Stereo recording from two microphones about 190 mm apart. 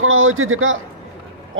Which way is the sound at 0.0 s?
90° right.